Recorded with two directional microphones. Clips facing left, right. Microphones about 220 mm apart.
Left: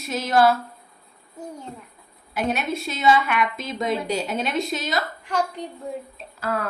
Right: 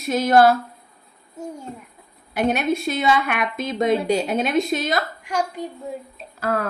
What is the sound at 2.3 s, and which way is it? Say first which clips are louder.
A woman's voice: right 5 dB; 55° right (ahead or behind).